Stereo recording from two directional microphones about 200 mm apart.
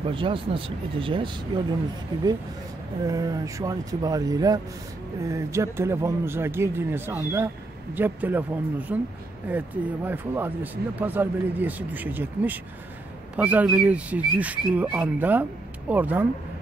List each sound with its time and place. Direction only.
0.0 s speech: 25° right (ahead or behind)
3.1 s a man's voice: 20° right (ahead or behind)